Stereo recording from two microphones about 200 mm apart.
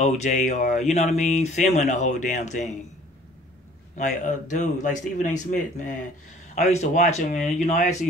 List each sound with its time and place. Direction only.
0.0 s speech: 35° left (ahead or behind)
3.9 s speech: 35° left (ahead or behind)